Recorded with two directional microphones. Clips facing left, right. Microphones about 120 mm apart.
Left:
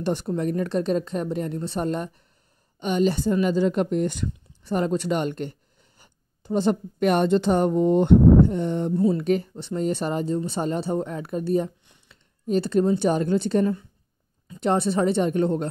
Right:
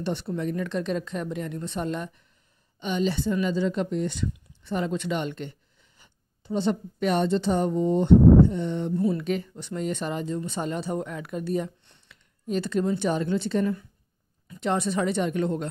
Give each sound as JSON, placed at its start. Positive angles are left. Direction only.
{"t": 0.0, "sound": "a woman's voice", "side_deg": 45}
{"t": 8.9, "sound": "a woman's voice", "side_deg": 30}
{"t": 9.2, "sound": "speech", "side_deg": 45}
{"t": 9.5, "sound": "a woman's voice", "side_deg": 30}
{"t": 13.1, "sound": "a woman's voice", "side_deg": 40}